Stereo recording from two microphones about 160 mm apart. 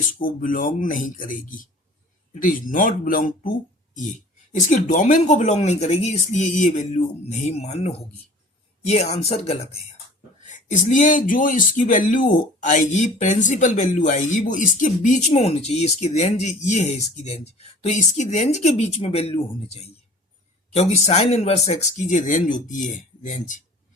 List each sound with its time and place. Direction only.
0.2 s speech: 60° left (ahead or behind)
4.7 s speech: 55° left (ahead or behind); by 9.8 s 40° left (ahead or behind)
10.4 s speech: 50° left (ahead or behind)